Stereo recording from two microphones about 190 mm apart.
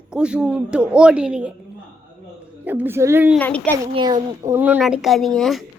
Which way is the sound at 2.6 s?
10° right (ahead or behind).